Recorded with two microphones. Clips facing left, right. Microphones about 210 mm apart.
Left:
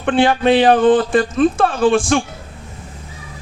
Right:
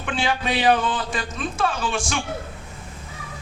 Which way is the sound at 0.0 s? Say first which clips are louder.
Left 11 dB; 55° left (ahead or behind).